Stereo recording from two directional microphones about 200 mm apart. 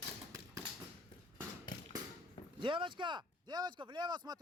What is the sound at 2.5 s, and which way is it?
Speech, 25° right (ahead or behind).